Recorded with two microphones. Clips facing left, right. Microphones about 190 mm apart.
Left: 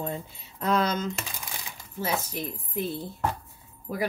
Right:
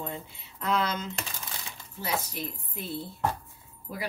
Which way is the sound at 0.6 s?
45° left (ahead or behind).